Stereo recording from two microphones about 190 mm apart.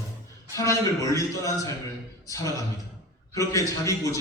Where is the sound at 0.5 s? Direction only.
15° left (ahead or behind).